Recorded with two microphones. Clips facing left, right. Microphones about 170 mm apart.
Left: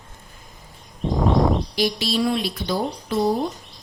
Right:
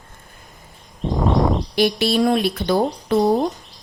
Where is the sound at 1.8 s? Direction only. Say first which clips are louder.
Right 5 dB; 60° right (ahead or behind).